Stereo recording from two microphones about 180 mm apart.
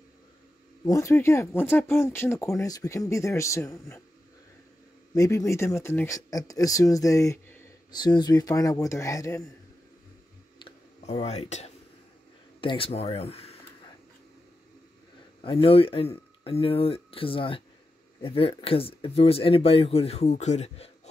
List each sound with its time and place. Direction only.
0.8 s speech: 15° left (ahead or behind)
5.1 s speech: 20° left (ahead or behind)
10.6 s a sound: 35° left (ahead or behind)
12.5 s speech: 30° left (ahead or behind)
15.4 s speech: 30° left (ahead or behind)